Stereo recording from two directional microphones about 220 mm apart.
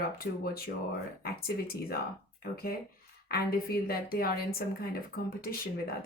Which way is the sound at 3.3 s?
45° left (ahead or behind).